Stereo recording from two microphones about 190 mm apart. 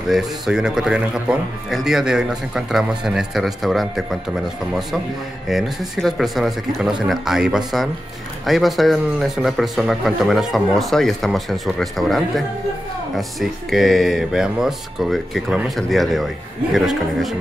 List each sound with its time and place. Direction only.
0.1 s a man's voice: 5° right (ahead or behind)
5.5 s a man's voice: centre (ahead or behind)